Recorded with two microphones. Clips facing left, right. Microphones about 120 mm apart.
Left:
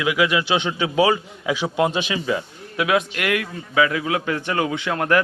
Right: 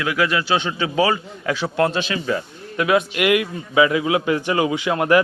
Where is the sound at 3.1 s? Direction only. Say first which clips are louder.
Right 5 dB; 15° right (ahead or behind).